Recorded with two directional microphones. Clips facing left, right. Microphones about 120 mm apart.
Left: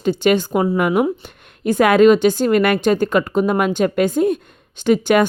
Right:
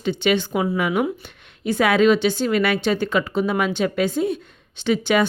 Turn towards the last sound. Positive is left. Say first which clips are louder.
# left 5 dB
turn(degrees=50)  # may be behind; listen again after turning